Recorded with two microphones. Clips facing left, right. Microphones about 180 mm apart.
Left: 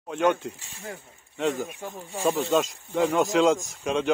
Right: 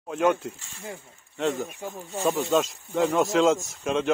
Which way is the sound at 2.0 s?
10° left (ahead or behind).